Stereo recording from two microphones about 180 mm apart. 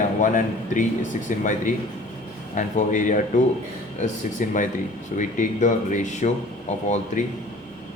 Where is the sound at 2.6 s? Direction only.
45° left (ahead or behind).